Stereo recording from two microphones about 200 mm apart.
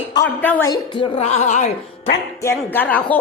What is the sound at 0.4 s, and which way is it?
Speech, 10° left (ahead or behind).